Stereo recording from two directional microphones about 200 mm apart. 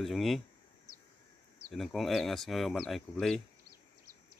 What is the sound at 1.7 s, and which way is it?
Speech, centre (ahead or behind).